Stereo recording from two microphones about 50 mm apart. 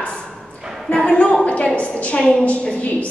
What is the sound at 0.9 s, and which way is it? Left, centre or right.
A woman's voice, centre.